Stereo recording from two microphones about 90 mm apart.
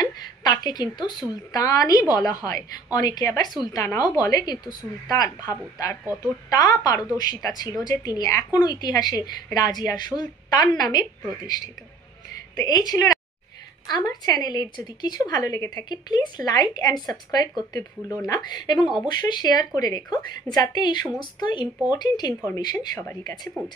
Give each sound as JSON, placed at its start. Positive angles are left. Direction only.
{"t": 0.0, "sound": "a sound", "side_deg": 45}
{"t": 1.5, "sound": "a woman's voice", "side_deg": 40}
{"t": 6.2, "sound": "a woman's voice", "side_deg": 45}
{"t": 15.5, "sound": "speech", "side_deg": 35}
{"t": 15.9, "sound": "a woman's voice", "side_deg": 50}
{"t": 18.0, "sound": "speech", "side_deg": 30}
{"t": 18.3, "sound": "a woman's voice", "side_deg": 50}